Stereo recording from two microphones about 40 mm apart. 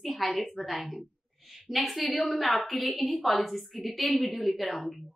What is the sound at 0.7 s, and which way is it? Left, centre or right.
A woman's voice, centre.